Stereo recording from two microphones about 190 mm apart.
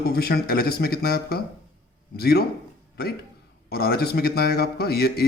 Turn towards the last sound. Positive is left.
turn(degrees=55)  # may be behind; listen again after turning